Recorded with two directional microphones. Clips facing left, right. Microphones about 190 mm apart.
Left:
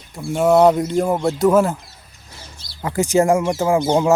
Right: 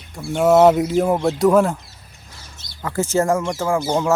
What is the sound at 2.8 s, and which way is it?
Speech, 15° left (ahead or behind).